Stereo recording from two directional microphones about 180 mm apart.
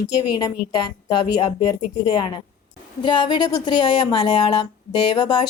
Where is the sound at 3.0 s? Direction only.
25° left (ahead or behind).